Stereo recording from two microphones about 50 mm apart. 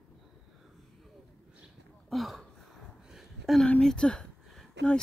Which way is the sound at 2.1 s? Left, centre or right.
Centre.